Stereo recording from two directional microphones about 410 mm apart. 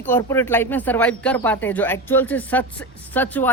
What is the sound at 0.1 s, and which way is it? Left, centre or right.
Speech, centre.